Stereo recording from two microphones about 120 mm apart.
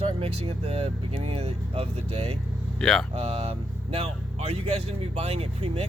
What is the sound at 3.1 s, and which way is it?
Speech, 55° right (ahead or behind).